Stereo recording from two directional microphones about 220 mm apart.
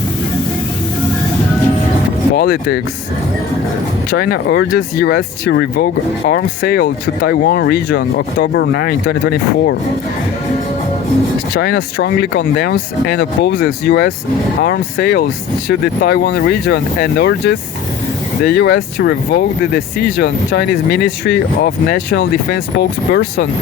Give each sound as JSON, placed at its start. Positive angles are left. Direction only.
{"t": 2.3, "sound": "speech", "side_deg": 45}
{"t": 4.1, "sound": "speech", "side_deg": 45}
{"t": 11.5, "sound": "speech", "side_deg": 45}